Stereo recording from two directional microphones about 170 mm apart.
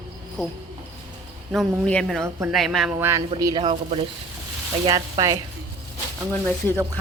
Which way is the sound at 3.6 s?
30° right (ahead or behind).